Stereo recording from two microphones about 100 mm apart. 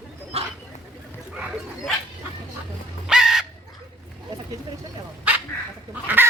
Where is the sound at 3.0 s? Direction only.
5° right (ahead or behind).